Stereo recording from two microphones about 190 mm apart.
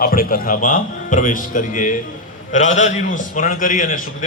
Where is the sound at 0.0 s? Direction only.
50° left (ahead or behind).